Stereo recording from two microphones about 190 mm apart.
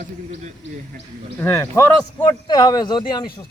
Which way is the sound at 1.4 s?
15° left (ahead or behind).